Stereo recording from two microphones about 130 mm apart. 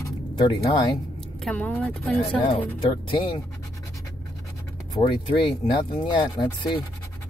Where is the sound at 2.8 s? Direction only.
40° left (ahead or behind).